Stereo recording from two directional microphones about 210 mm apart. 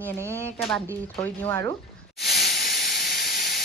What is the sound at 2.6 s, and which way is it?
Steam, 50° left (ahead or behind).